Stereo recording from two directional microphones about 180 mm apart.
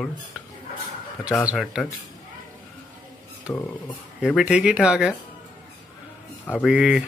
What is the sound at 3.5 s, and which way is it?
Speech, 20° left (ahead or behind).